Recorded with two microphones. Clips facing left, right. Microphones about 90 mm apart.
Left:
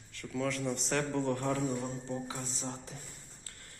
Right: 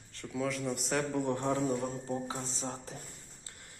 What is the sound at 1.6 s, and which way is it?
Speech, 40° right (ahead or behind).